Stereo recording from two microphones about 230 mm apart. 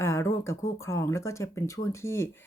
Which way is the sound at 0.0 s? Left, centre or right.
Centre.